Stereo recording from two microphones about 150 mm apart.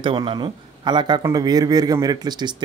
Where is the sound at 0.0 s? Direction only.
35° right (ahead or behind).